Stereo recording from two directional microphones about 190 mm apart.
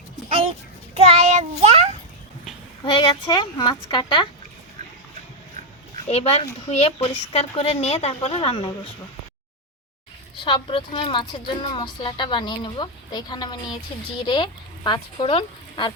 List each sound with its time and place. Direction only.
0.3 s a sound: 30° right (ahead or behind)
0.9 s child singing: 30° right (ahead or behind)
2.8 s a woman's voice: 25° left (ahead or behind)
6.1 s a woman's voice: 35° left (ahead or behind)
10.4 s a woman's voice: 25° left (ahead or behind)